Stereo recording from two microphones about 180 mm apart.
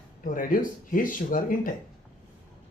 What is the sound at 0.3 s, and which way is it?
Speech, 50° left (ahead or behind).